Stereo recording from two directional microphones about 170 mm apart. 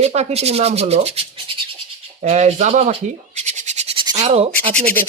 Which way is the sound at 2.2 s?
40° right (ahead or behind).